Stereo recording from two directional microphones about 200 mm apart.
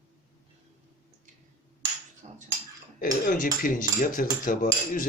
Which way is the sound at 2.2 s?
35° right (ahead or behind).